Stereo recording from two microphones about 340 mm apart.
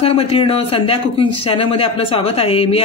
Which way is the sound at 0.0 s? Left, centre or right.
Centre.